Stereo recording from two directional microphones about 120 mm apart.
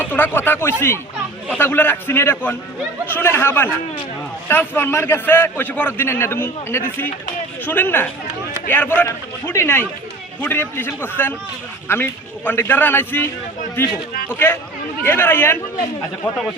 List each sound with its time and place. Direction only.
0.0 s a man's voice: 15° left (ahead or behind)